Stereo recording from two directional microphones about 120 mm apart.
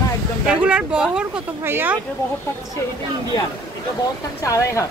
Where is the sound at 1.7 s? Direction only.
20° right (ahead or behind).